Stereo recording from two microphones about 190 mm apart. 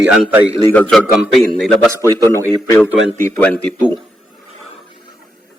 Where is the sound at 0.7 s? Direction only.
5° left (ahead or behind).